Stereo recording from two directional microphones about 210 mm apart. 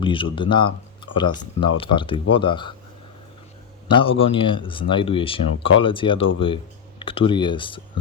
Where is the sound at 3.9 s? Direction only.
25° left (ahead or behind).